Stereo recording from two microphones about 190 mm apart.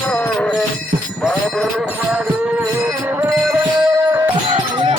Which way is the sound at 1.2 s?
Centre (ahead or behind).